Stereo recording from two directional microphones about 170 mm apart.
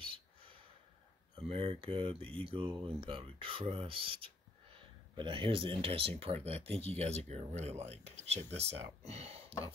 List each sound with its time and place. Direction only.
0.0 s gasp: 30° right (ahead or behind)
1.3 s speech: 35° right (ahead or behind)